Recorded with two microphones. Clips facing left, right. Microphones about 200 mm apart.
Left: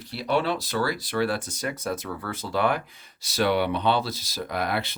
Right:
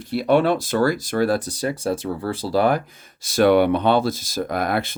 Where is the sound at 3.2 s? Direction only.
50° right (ahead or behind).